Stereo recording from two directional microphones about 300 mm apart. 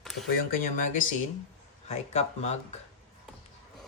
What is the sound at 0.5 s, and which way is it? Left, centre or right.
Speech, left.